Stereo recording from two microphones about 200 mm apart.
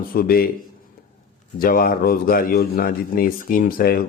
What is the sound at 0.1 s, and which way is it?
Speech, 45° left (ahead or behind).